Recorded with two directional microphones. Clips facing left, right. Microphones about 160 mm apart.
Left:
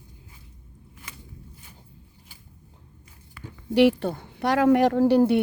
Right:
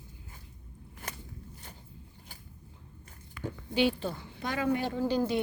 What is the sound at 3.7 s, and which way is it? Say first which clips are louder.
Speech: left 9 dB; 85° left.